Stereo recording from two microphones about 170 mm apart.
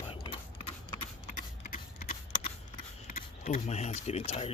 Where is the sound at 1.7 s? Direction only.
50° left (ahead or behind).